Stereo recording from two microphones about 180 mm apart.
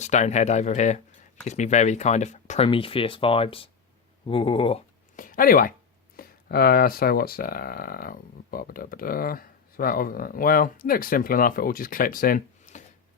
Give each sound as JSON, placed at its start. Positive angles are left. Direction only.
{"t": 0.0, "sound": "speech", "side_deg": 40}
{"t": 2.6, "sound": "speech", "side_deg": 30}
{"t": 5.1, "sound": "speech", "side_deg": 50}